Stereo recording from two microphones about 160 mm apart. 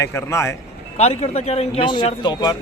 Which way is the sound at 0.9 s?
45° left (ahead or behind).